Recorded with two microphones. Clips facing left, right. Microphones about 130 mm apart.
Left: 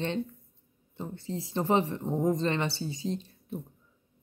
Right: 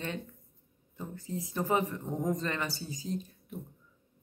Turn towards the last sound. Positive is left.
turn(degrees=30)  # may be behind; listen again after turning